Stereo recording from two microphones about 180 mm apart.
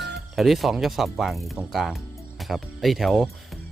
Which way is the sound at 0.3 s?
Centre (ahead or behind).